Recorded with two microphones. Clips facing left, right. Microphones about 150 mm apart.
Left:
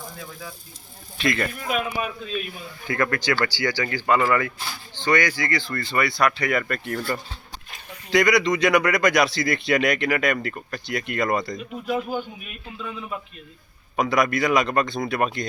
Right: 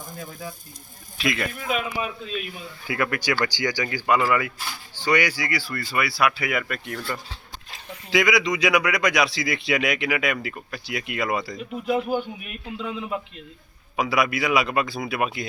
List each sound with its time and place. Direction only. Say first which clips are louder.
0.0 s speech: right 2 dB; 45° right (ahead or behind)
1.2 s speech: left 2 dB; centre (ahead or behind)
1.6 s speech: even; 25° right (ahead or behind)
2.8 s speech: left 2 dB; 10° right (ahead or behind)
8.1 s speech: left 2 dB; centre (ahead or behind)
11.5 s speech: right 2 dB; 20° right (ahead or behind)
13.9 s speech: left 2 dB; 5° right (ahead or behind)